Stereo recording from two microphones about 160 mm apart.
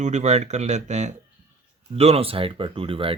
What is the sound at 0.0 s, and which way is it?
Speech, 45° right (ahead or behind).